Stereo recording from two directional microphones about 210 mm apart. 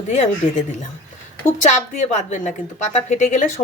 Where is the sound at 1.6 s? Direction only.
35° left (ahead or behind).